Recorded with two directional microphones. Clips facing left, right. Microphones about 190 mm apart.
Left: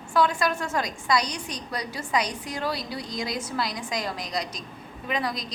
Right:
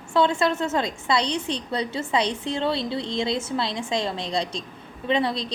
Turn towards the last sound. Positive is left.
turn(degrees=-30)  # may be behind; listen again after turning